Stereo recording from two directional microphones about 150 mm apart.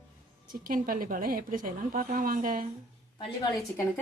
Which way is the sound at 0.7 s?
70° right (ahead or behind).